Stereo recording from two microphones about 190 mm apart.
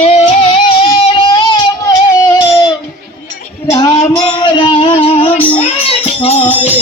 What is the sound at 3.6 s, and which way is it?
Music, 15° left (ahead or behind).